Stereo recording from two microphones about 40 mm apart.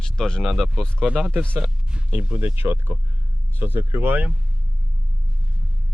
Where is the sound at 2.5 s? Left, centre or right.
Right.